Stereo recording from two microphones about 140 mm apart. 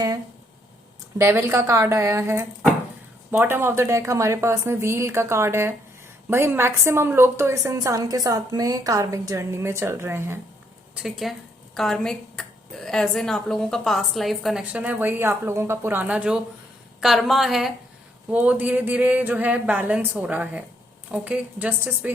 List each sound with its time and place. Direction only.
1.2 s a woman's voice: 20° right (ahead or behind)
10.9 s speech: centre (ahead or behind)